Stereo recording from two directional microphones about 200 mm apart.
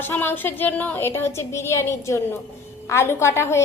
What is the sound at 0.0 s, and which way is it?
Speech, 10° left (ahead or behind).